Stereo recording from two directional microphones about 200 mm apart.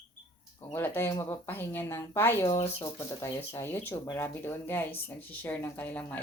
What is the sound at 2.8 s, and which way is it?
Speech, 15° left (ahead or behind).